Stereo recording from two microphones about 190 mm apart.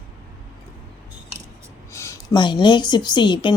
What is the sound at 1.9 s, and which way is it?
A woman's voice, 15° left (ahead or behind).